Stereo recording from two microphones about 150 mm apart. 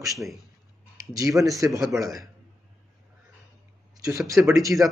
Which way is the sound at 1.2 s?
20° right (ahead or behind).